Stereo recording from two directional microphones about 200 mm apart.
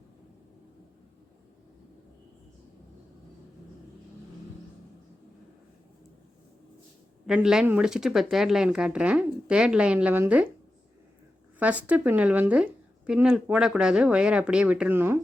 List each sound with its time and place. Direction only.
7.3 s speech: 5° right (ahead or behind)
11.6 s speech: 5° right (ahead or behind)